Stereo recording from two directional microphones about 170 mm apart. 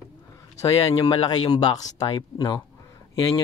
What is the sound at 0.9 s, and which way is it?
Speech, 25° left (ahead or behind).